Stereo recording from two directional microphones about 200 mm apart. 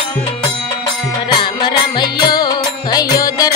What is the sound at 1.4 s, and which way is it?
Music, 25° left (ahead or behind).